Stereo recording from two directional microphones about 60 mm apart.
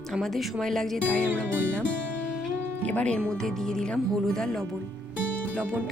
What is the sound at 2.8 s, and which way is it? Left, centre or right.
Speech, centre.